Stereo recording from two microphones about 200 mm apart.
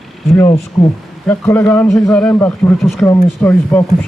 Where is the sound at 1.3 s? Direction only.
15° left (ahead or behind).